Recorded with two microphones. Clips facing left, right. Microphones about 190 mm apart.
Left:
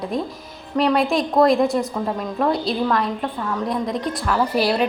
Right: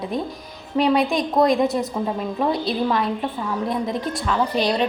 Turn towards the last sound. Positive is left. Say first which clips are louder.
# left 1 dB
turn(degrees=5)  # may be behind; listen again after turning